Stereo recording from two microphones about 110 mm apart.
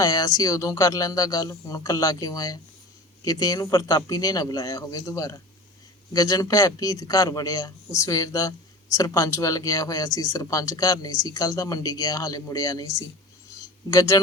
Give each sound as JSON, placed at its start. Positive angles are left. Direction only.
{"t": 0.0, "sound": "a man's voice", "side_deg": 35}